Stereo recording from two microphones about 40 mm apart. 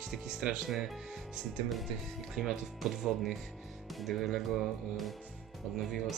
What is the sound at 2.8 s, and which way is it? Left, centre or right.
Speech, centre.